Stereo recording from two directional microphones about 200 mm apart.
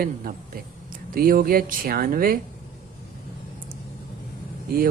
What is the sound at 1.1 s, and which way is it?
Speech, 45° right (ahead or behind).